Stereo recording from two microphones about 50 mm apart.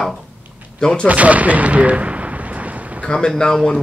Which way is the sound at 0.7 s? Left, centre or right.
Centre.